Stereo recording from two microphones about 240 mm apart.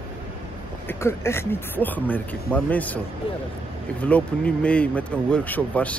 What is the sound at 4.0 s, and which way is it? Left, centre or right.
Speech, centre.